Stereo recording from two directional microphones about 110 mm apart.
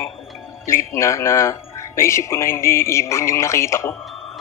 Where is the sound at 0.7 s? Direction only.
25° left (ahead or behind).